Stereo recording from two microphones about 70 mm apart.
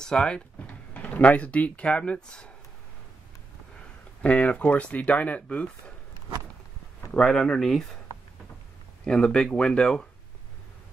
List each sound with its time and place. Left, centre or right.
0.0 s speech: centre
4.2 s speech: centre
7.1 s speech: centre
9.0 s speech: centre